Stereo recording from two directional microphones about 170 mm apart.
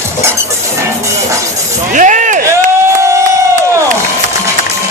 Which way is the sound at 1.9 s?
45° right (ahead or behind).